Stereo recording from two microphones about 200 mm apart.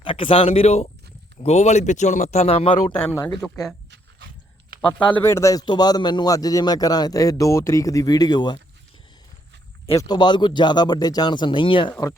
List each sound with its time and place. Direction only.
0.0 s speech: 25° left (ahead or behind)
2.9 s a man's voice: 10° left (ahead or behind)
4.8 s a man's voice: 5° left (ahead or behind)
9.9 s speech: 20° left (ahead or behind)